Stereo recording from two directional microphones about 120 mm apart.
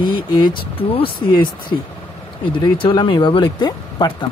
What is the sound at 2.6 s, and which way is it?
Speech, 45° left (ahead or behind).